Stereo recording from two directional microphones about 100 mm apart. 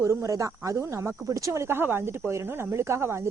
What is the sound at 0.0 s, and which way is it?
Speech, 30° right (ahead or behind).